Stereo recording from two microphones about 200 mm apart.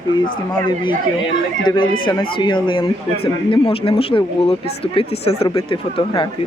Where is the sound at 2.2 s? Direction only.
25° left (ahead or behind).